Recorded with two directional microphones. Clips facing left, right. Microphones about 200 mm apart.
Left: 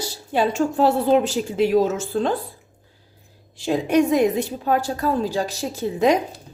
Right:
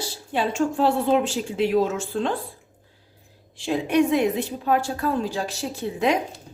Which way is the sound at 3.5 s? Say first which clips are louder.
Left 2 dB; 40° left (ahead or behind).